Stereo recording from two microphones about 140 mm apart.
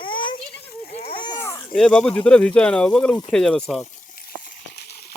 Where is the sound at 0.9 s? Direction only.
45° left (ahead or behind).